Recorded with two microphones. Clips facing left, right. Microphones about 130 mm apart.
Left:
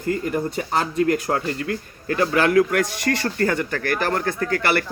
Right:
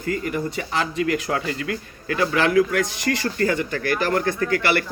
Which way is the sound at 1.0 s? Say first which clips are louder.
Left 2 dB; 45° left (ahead or behind).